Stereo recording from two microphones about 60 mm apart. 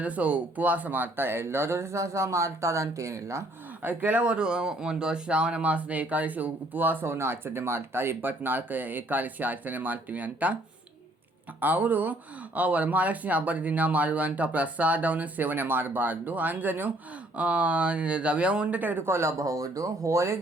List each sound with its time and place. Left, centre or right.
0.0 s speech: right
3.8 s speech: right
4.2 s speech: centre; by 7.1 s right
7.1 s speech: right
11.6 s speech: right
17.3 s speech: right
19.0 s speech: right
19.4 s speech: right